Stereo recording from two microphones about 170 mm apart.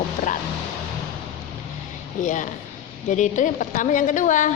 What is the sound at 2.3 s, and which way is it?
A woman's voice, 50° left (ahead or behind).